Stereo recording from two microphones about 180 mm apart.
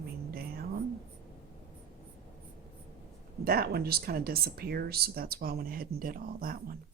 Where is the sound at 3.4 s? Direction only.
55° right (ahead or behind).